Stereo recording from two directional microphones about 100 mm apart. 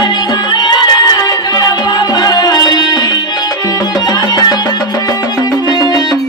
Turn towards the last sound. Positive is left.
turn(degrees=40)  # may be behind; listen again after turning